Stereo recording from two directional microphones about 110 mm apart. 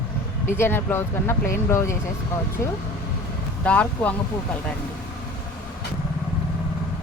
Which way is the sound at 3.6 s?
10° left (ahead or behind).